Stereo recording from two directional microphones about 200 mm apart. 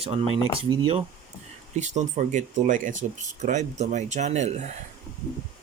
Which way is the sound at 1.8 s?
35° right (ahead or behind).